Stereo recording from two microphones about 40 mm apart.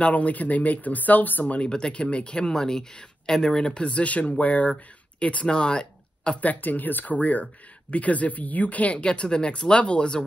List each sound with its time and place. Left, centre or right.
0.0 s speech: left
1.6 s speech: left
6.4 s speech: left
9.1 s speech: left